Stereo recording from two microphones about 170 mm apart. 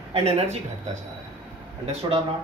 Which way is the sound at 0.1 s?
40° right (ahead or behind).